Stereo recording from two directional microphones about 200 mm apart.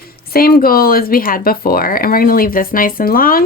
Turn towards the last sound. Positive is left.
turn(degrees=45)  # may be behind; listen again after turning